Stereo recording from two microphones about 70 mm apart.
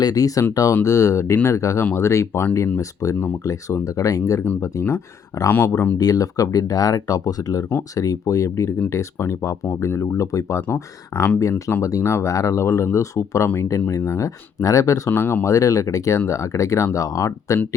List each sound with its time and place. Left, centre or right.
0.0 s speech: left
4.6 s speech: left
6.0 s speech: left
10.6 s speech: left
11.8 s speech: left
12.0 s speech: left
12.3 s speech: left
15.1 s speech: left
15.4 s speech: left